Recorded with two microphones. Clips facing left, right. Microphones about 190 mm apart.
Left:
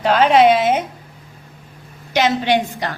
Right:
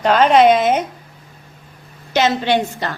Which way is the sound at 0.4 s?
45° right (ahead or behind).